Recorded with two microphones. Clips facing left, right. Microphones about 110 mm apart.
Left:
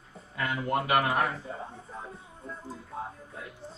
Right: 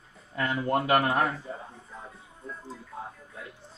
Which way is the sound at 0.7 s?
30° right (ahead or behind).